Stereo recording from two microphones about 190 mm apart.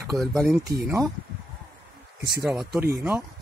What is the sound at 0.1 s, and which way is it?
Speech, centre (ahead or behind).